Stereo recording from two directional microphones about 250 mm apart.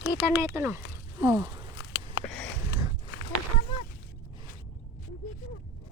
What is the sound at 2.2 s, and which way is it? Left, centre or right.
Sniff, centre.